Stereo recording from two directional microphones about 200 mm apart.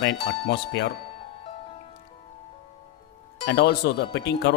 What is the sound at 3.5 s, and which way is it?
Speech, 60° left (ahead or behind).